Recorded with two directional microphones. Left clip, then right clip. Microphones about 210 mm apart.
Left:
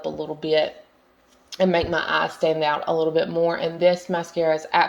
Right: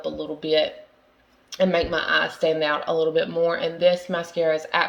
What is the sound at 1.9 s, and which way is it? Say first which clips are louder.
Speech: even; 30° left (ahead or behind).